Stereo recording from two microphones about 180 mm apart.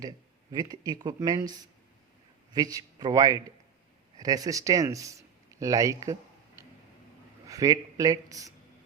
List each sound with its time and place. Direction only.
0.5 s speech: 20° right (ahead or behind)
2.6 s speech: 20° right (ahead or behind)
7.4 s speech: 20° right (ahead or behind)